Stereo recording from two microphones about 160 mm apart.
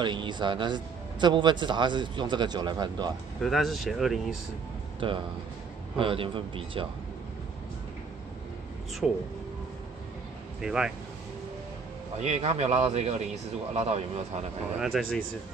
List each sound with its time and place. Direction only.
0.0 s a man's voice: 30° right (ahead or behind)
3.4 s speech: centre (ahead or behind)
5.0 s a man's voice: 30° right (ahead or behind)
9.0 s speech: centre (ahead or behind)
10.6 s speech: 5° right (ahead or behind)
12.2 s speech: 45° right (ahead or behind)
14.8 s speech: centre (ahead or behind)